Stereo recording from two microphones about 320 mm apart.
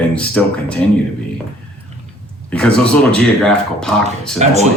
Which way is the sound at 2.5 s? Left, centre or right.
Centre.